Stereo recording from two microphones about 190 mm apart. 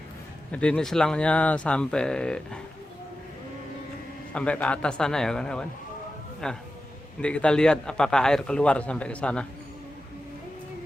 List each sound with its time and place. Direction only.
0.5 s a man's voice: 5° left (ahead or behind)
4.4 s a man's voice: 5° left (ahead or behind)